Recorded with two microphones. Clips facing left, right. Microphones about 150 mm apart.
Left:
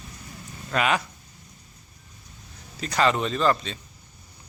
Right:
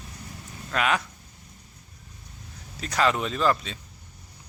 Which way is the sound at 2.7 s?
Centre (ahead or behind).